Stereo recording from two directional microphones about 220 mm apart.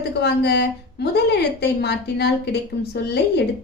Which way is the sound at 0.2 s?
50° left (ahead or behind).